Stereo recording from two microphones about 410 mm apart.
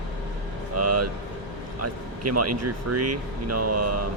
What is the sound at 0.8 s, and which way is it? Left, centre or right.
Speech, right.